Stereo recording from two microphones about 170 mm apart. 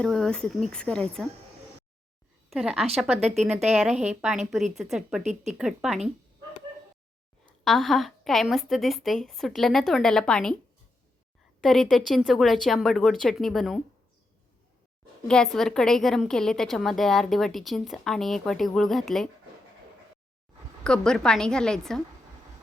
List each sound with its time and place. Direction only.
0.0 s a woman's voice: 5° left (ahead or behind)
2.5 s a woman's voice: centre (ahead or behind)
3.2 s speech: 40° right (ahead or behind)
3.4 s a woman's voice: centre (ahead or behind)
7.6 s a woman's voice: centre (ahead or behind)
11.6 s a woman's voice: centre (ahead or behind)
15.3 s a woman's voice: 5° left (ahead or behind)
20.8 s a woman's voice: 5° left (ahead or behind)